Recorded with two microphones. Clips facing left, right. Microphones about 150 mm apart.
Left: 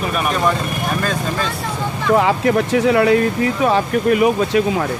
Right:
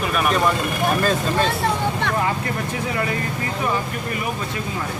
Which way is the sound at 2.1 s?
85° left.